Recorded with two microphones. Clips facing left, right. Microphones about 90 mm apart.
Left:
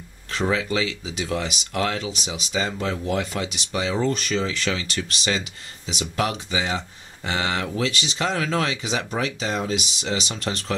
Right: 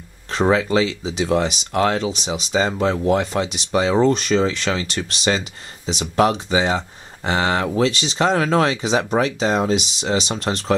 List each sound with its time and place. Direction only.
0.3 s speech: 35° right (ahead or behind)